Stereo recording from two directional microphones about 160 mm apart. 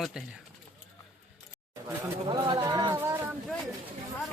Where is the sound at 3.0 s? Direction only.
15° right (ahead or behind).